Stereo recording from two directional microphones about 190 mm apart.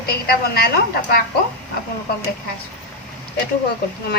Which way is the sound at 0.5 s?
55° left (ahead or behind).